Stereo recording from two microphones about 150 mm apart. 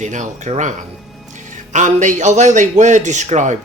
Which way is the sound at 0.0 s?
55° right (ahead or behind).